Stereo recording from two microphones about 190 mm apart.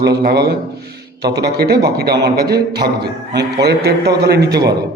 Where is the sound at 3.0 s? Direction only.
60° right (ahead or behind).